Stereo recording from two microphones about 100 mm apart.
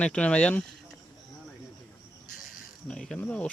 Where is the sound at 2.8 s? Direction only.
5° left (ahead or behind).